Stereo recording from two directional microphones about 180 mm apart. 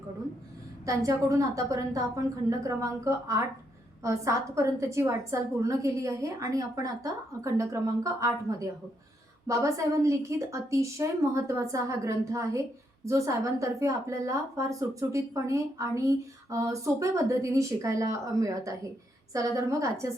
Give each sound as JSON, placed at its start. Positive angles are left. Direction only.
{"t": 0.9, "sound": "a woman's voice", "side_deg": -15}